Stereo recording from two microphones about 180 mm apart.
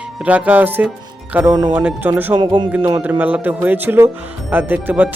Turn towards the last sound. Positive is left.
turn(degrees=-10)  # may be behind; listen again after turning